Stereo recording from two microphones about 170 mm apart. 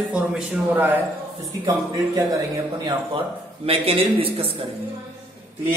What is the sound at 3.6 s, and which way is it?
A man's voice, 35° right (ahead or behind).